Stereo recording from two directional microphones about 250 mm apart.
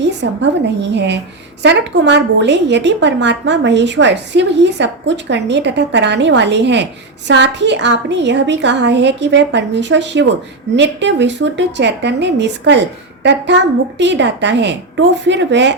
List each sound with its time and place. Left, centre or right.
0.0 s a woman's voice: right
14.0 s a woman's voice: right